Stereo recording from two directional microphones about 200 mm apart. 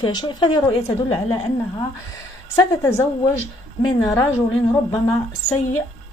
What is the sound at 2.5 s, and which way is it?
Speech, 15° left (ahead or behind).